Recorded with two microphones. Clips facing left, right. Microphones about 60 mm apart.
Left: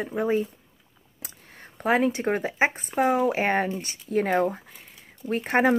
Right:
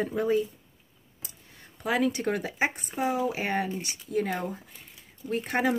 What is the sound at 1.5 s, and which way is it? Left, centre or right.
Speech, left.